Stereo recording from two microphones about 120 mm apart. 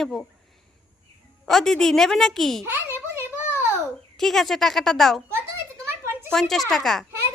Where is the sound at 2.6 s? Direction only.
20° right (ahead or behind).